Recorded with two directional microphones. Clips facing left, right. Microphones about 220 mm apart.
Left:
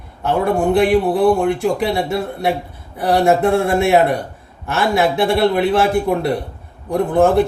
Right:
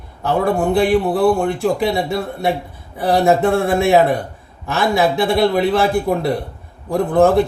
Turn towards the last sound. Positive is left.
turn(degrees=0)  # may be behind; listen again after turning